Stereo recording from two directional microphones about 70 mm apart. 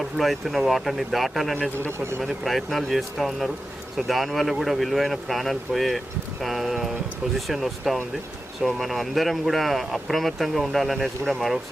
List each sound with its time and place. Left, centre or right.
0.0 s speech: centre
1.9 s speech: right
2.2 s speech: centre